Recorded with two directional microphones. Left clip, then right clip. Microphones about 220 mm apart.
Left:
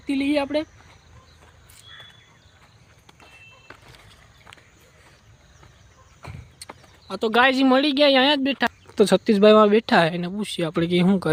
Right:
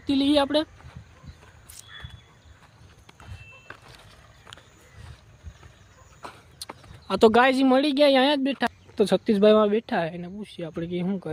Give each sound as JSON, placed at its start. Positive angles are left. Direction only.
{"t": 0.3, "sound": "speech", "side_deg": -15}
{"t": 3.7, "sound": "vehicle", "side_deg": 0}
{"t": 6.6, "sound": "a sound", "side_deg": -10}
{"t": 7.3, "sound": "speech", "side_deg": -15}
{"t": 7.5, "sound": "speech", "side_deg": 0}